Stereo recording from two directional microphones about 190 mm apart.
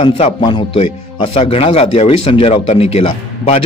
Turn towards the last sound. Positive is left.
turn(degrees=30)  # may be behind; listen again after turning